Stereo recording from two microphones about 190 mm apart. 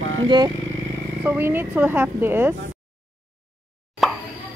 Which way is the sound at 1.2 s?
10° right (ahead or behind).